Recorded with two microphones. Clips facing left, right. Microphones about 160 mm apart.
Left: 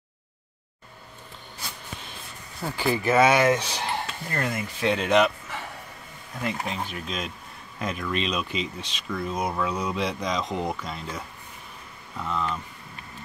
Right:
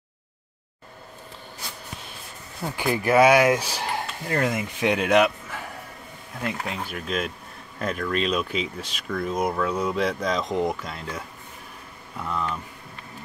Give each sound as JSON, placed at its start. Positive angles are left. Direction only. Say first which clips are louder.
{"t": 2.6, "sound": "speech", "louder": "even", "side_deg": -10}
{"t": 4.4, "sound": "speech", "louder": "right 3 dB", "side_deg": -20}